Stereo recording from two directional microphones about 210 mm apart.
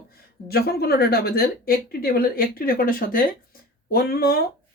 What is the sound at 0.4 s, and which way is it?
Speech, 45° left (ahead or behind).